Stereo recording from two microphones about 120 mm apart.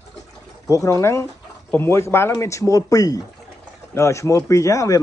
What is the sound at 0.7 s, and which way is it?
Speech, 25° left (ahead or behind).